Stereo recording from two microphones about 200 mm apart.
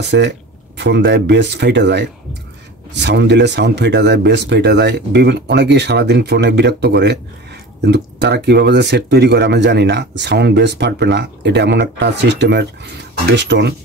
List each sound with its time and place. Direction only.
0.0 s speech: 60° right (ahead or behind)